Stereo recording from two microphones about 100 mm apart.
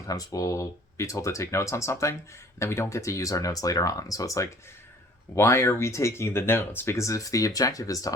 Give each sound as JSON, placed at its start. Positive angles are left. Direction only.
{"t": 0.1, "sound": "speech", "side_deg": 35}